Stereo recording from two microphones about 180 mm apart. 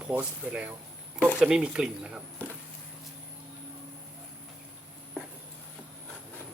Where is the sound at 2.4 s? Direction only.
10° left (ahead or behind).